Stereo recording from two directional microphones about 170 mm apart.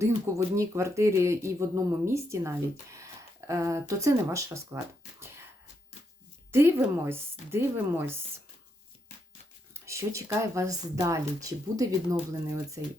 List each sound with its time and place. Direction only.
0.5 s speech: 15° right (ahead or behind)
5.2 s a sound: 15° right (ahead or behind)
6.5 s speech: 15° right (ahead or behind)
9.8 s speech: 15° right (ahead or behind)